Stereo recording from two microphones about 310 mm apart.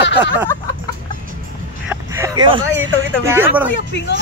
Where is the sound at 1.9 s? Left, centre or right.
Centre.